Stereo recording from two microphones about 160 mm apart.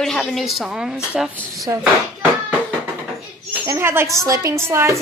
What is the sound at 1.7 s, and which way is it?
Speech, 15° right (ahead or behind).